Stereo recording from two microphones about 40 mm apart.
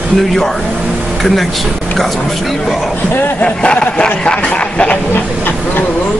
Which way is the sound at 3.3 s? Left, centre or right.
Left.